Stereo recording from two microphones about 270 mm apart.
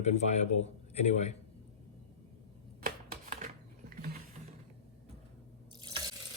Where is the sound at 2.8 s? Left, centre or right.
Right.